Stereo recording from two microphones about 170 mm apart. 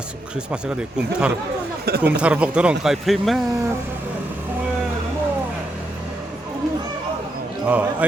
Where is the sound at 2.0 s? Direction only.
5° right (ahead or behind).